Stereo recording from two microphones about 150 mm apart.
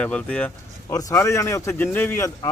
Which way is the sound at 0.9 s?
20° left (ahead or behind).